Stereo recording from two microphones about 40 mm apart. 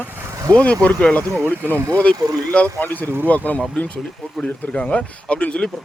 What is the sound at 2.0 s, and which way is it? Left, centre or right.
Speech, left.